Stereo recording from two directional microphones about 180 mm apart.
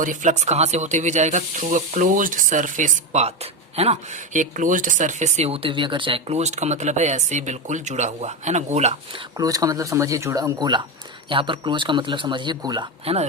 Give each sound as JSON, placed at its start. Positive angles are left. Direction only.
{"t": 0.0, "sound": "speech", "side_deg": -45}
{"t": 9.4, "sound": "a man's voice", "side_deg": -20}